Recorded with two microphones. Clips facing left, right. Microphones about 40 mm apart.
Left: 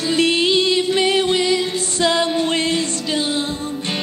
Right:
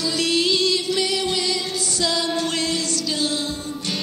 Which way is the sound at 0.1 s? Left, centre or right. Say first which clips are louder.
Left 6 dB; left.